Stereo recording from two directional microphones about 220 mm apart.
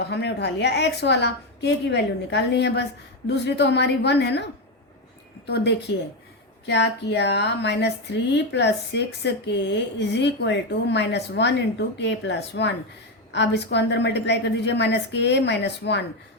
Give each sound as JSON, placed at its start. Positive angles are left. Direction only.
{"t": 0.0, "sound": "speech", "side_deg": 50}
{"t": 5.5, "sound": "speech", "side_deg": 50}